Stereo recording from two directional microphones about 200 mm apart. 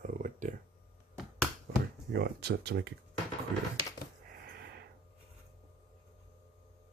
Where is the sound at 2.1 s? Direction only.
55° right (ahead or behind).